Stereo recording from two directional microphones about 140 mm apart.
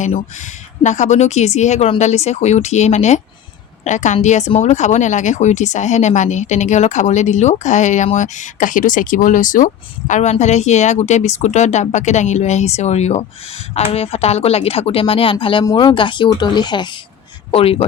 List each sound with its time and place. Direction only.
0.3 s speech: 60° left (ahead or behind); by 17.0 s 30° left (ahead or behind)
17.5 s speech: 45° left (ahead or behind)